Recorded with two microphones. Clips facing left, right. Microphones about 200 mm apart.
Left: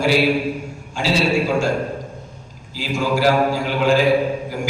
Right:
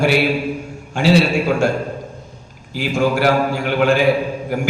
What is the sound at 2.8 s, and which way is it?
A man's voice, 60° right (ahead or behind).